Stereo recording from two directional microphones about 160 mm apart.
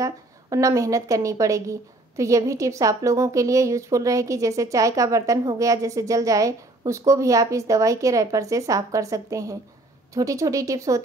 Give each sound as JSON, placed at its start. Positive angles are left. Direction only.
{"t": 0.0, "sound": "a woman's voice", "side_deg": -20}